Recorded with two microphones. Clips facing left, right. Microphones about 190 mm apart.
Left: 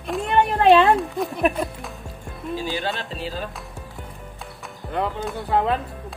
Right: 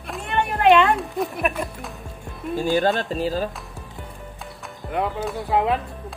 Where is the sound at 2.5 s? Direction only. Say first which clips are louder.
Right 7 dB; 50° right (ahead or behind).